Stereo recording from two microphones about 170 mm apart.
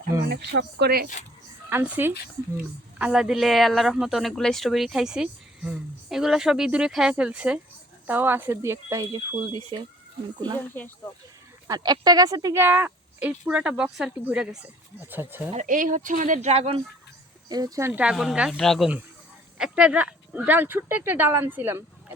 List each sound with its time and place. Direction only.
0.3 s speech: 85° right
1.7 s a woman's voice: 15° right (ahead or behind)
10.8 s speech: 10° left (ahead or behind)
11.7 s a woman's voice: 25° right (ahead or behind)
15.5 s speech: 50° right (ahead or behind)
17.5 s a woman's voice: 20° right (ahead or behind)